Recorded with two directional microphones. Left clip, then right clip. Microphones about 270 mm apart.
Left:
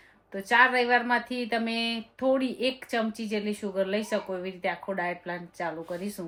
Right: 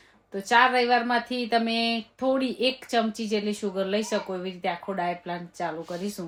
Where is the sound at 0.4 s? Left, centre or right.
Centre.